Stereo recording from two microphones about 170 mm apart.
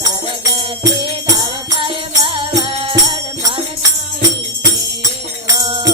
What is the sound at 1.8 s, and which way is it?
Music, 30° right (ahead or behind).